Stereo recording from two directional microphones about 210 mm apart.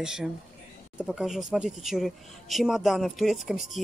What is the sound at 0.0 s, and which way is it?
Speech, 5° right (ahead or behind).